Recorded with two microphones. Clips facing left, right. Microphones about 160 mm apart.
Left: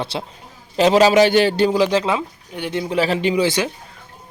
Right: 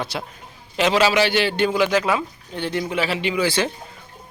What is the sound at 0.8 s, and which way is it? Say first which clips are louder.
A man's voice: left 5 dB; 40° left (ahead or behind).